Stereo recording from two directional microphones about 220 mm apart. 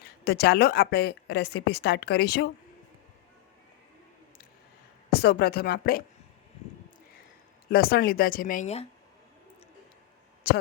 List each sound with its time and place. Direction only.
0.3 s a woman's voice: 45° left (ahead or behind)
5.1 s a woman's voice: 45° left (ahead or behind)
7.7 s speech: 45° left (ahead or behind)